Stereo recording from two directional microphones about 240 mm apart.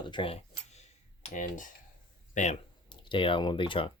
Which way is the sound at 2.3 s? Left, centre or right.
Left.